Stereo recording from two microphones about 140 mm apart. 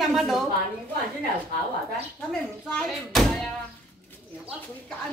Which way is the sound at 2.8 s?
Centre (ahead or behind).